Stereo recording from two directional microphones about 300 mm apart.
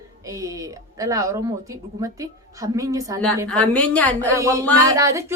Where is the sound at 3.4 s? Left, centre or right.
Centre.